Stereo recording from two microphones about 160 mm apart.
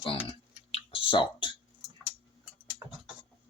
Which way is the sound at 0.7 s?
35° left (ahead or behind).